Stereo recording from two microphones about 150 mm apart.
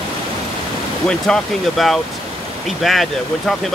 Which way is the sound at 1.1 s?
5° left (ahead or behind).